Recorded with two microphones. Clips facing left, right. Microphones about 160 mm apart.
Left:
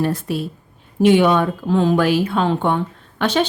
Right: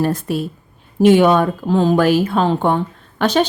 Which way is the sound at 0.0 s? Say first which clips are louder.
Right 2 dB; 45° right (ahead or behind).